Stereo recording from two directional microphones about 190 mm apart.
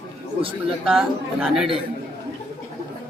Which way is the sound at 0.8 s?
5° right (ahead or behind).